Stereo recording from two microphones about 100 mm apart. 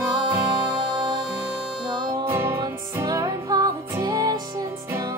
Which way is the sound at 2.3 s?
25° right (ahead or behind).